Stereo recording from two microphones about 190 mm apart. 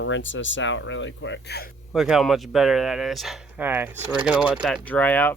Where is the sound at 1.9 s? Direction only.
Centre (ahead or behind).